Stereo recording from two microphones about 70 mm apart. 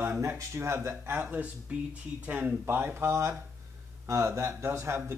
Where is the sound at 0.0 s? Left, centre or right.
Right.